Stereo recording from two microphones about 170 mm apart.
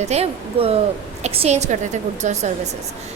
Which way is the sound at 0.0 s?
40° right (ahead or behind).